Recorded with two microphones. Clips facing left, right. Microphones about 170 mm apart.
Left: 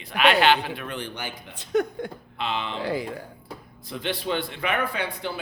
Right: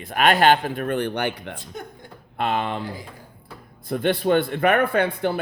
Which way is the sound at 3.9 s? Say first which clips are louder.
Right 8 dB; 55° right (ahead or behind).